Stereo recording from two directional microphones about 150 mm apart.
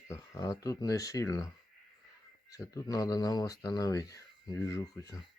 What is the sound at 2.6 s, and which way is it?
Speech, 25° left (ahead or behind).